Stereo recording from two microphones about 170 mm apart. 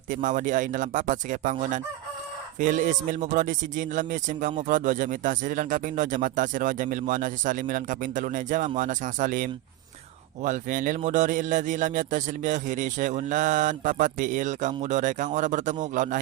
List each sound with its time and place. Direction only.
0.1 s speech: 50° right (ahead or behind)